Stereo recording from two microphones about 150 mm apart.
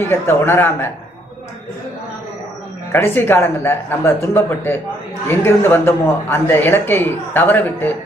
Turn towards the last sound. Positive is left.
turn(degrees=15)  # may be behind; listen again after turning